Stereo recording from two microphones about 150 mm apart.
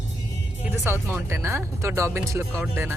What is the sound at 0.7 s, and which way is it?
Speech, 15° right (ahead or behind).